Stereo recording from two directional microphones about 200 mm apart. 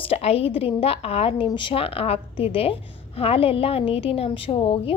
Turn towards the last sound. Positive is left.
turn(degrees=30)  # may be behind; listen again after turning